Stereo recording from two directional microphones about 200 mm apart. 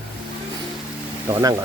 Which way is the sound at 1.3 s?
15° right (ahead or behind).